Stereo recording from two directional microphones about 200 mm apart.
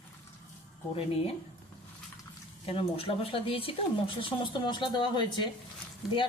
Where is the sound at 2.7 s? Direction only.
30° left (ahead or behind).